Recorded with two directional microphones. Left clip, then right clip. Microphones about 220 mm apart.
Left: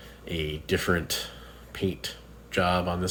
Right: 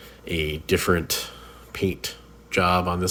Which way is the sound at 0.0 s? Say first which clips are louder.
Right 5 dB; 35° right (ahead or behind).